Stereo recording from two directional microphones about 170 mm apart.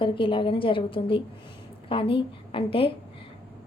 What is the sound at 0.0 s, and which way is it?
A woman's voice, 30° left (ahead or behind).